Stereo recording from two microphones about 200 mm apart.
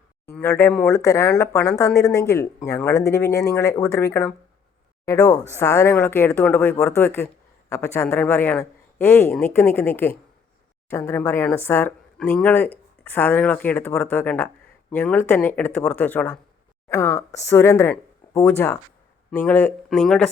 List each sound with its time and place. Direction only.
0.3 s speech: 10° left (ahead or behind)